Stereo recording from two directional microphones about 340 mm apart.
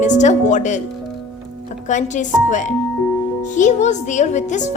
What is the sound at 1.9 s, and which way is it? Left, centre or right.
Speech, left.